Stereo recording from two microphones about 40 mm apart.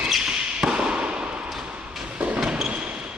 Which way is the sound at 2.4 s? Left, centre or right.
Centre.